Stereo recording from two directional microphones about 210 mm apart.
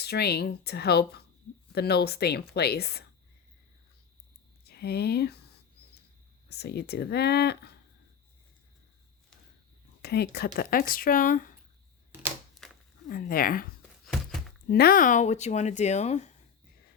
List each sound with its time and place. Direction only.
0.0 s speech: 50° left (ahead or behind)
4.6 s speech: 50° left (ahead or behind)
6.5 s speech: 50° left (ahead or behind)
10.0 s speech: 50° left (ahead or behind)
12.6 s a sound: 5° left (ahead or behind)
13.1 s speech: 45° left (ahead or behind)
14.0 s a sound: centre (ahead or behind)
14.7 s speech: 45° left (ahead or behind)